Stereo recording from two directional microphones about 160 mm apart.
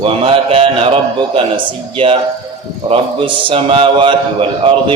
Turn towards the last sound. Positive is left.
turn(degrees=-30)  # may be behind; listen again after turning